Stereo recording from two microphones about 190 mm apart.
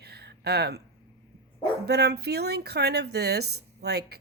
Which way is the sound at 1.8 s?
60° right (ahead or behind).